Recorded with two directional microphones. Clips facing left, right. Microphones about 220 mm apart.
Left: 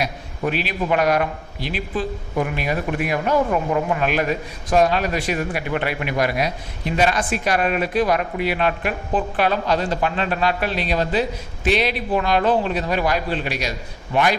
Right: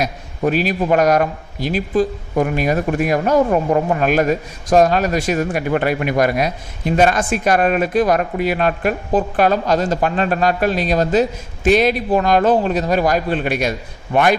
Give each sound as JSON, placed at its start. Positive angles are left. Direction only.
{"t": 0.0, "sound": "a man's voice", "side_deg": -40}